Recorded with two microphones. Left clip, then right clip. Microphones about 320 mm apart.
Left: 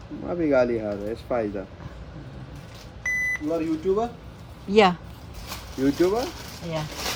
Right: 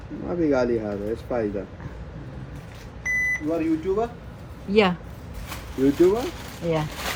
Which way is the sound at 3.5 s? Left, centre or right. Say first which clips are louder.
Right 1 dB; left.